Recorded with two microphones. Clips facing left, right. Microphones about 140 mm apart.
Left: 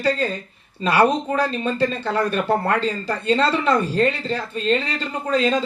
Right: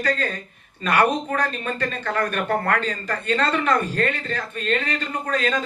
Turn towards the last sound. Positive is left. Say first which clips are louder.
# left 4 dB
turn(degrees=30)  # may be behind; listen again after turning